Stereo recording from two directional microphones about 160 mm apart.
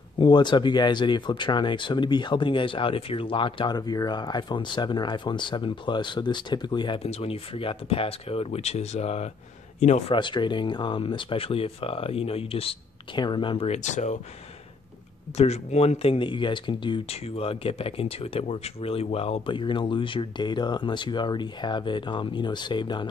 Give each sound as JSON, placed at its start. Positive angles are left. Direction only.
{"t": 0.2, "sound": "speech", "side_deg": 25}
{"t": 15.3, "sound": "speech", "side_deg": 40}